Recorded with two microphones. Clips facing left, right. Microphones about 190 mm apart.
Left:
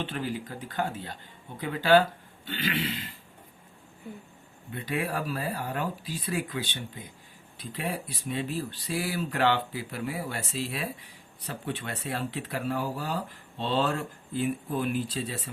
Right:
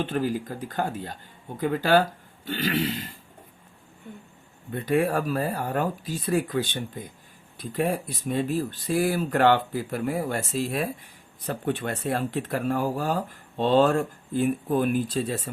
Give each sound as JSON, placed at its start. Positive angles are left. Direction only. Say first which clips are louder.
{"t": 0.0, "sound": "speech", "louder": "right 6 dB", "side_deg": -45}
{"t": 4.1, "sound": "speech", "louder": "left 1 dB", "side_deg": 5}
{"t": 4.7, "sound": "speech", "louder": "right 8 dB", "side_deg": -45}